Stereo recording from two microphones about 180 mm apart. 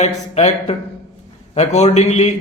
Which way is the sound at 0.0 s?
40° left (ahead or behind).